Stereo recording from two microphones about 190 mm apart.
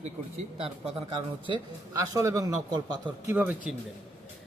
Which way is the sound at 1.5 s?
20° right (ahead or behind).